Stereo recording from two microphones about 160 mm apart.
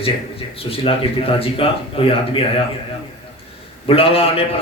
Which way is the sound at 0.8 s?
35° left (ahead or behind).